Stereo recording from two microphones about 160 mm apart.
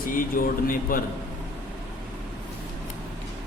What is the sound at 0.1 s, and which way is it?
Mantra, 60° left (ahead or behind).